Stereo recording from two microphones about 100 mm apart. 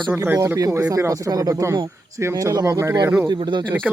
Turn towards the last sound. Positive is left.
turn(degrees=-50)  # may be behind; listen again after turning